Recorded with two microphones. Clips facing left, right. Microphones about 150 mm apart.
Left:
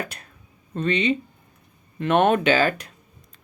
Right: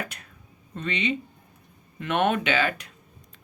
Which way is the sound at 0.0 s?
35° left (ahead or behind).